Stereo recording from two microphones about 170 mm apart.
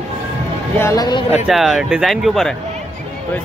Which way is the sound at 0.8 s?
20° left (ahead or behind).